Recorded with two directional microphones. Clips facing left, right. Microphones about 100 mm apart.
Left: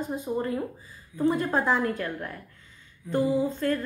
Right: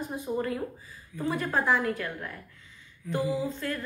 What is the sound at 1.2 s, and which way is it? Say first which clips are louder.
Speech: left 4 dB; 25° left (ahead or behind).